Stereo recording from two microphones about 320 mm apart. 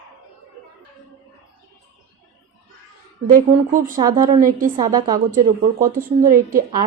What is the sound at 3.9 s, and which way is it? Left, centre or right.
A woman's voice, centre.